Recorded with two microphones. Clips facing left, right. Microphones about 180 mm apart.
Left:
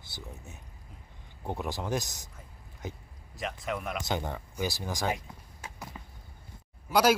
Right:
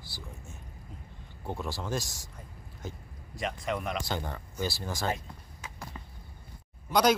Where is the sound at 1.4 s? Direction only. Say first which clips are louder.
Left 2 dB; 20° left (ahead or behind).